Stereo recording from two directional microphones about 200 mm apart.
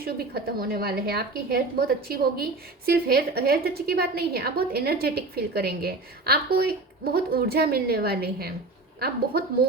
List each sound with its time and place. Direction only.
0.0 s a woman's voice: 50° right (ahead or behind)